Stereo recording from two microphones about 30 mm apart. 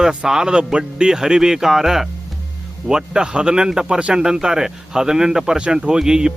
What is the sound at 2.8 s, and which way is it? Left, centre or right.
Speech, right.